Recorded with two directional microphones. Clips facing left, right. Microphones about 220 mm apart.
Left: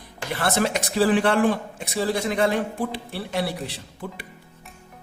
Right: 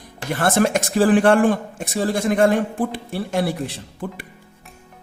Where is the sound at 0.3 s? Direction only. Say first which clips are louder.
Right 5 dB; 50° right (ahead or behind).